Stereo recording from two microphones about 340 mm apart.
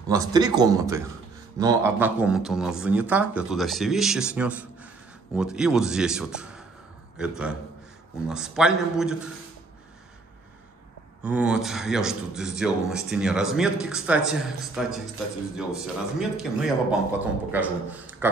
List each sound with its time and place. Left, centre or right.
0.1 s a man's voice: centre
11.2 s speech: centre